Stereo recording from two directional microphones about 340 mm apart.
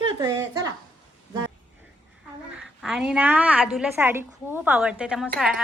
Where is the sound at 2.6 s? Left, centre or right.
Centre.